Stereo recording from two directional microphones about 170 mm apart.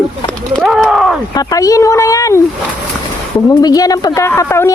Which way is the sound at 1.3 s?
20° left (ahead or behind).